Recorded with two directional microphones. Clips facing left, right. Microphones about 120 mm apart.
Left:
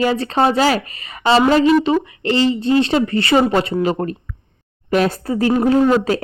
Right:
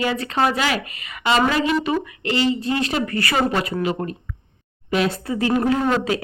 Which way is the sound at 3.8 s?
45° left (ahead or behind).